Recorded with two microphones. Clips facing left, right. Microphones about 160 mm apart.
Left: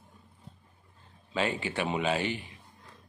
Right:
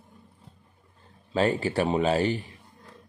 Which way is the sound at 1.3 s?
40° right (ahead or behind).